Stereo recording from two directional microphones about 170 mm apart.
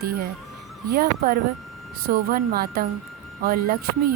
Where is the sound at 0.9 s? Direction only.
60° right (ahead or behind).